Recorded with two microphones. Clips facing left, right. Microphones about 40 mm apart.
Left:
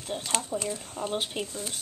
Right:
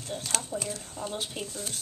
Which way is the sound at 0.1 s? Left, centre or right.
Centre.